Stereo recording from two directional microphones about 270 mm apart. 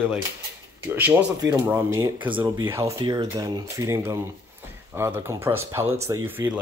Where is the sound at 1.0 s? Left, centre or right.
Centre.